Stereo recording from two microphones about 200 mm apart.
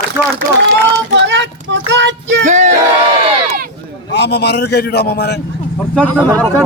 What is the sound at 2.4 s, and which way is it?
Speech, 35° right (ahead or behind).